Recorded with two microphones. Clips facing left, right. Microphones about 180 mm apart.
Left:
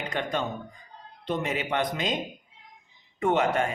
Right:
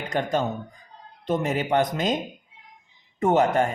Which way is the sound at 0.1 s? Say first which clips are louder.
Right 6 dB; 40° right (ahead or behind).